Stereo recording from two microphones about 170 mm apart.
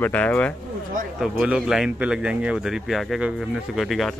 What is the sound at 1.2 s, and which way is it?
Speech, 5° right (ahead or behind).